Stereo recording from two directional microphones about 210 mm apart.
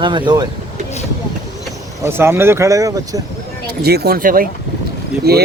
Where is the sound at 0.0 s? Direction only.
20° right (ahead or behind).